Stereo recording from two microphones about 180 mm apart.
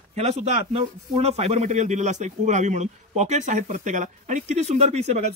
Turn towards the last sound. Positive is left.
turn(degrees=-40)  # may be behind; listen again after turning